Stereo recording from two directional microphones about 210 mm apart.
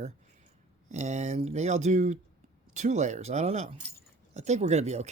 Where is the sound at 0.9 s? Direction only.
35° right (ahead or behind).